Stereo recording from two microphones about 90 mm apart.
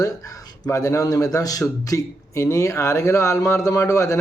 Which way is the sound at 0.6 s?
35° left (ahead or behind).